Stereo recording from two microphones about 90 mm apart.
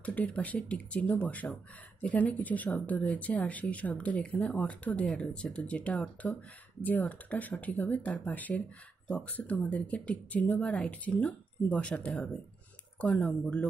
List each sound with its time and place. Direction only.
0.0 s speech: 15° left (ahead or behind)